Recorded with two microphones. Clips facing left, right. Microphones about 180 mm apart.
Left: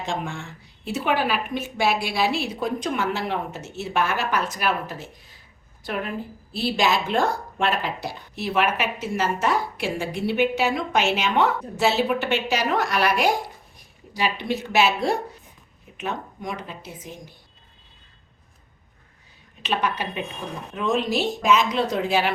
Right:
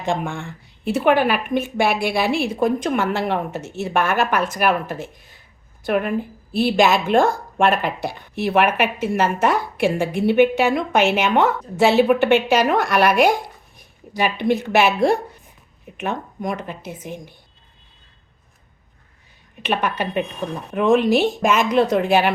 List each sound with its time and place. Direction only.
0.0 s a woman's voice: 55° right (ahead or behind)
19.6 s a woman's voice: 55° right (ahead or behind)